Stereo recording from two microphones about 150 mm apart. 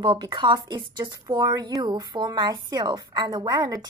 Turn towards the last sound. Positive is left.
turn(degrees=-25)  # may be behind; listen again after turning